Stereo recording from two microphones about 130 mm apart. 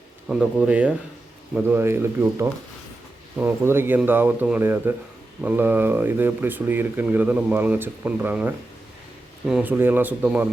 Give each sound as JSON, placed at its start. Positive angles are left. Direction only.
{"t": 0.3, "sound": "speech", "side_deg": -5}